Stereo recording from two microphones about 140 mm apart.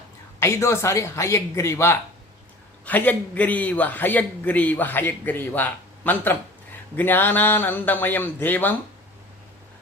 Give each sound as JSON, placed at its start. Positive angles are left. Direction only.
{"t": 0.3, "sound": "a man's voice", "side_deg": 20}